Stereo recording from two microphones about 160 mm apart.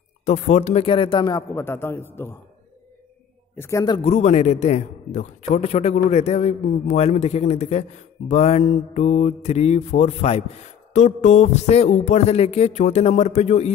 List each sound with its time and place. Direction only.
0.2 s speech: 45° left (ahead or behind)
1.5 s a man's voice: 15° left (ahead or behind)
3.5 s a man's voice: 15° left (ahead or behind)
4.0 s speech: 45° left (ahead or behind)